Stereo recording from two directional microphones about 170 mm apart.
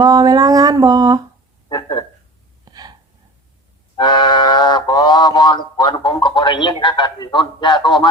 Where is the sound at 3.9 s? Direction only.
25° left (ahead or behind).